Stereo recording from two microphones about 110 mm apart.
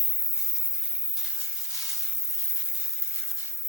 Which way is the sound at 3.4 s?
20° right (ahead or behind).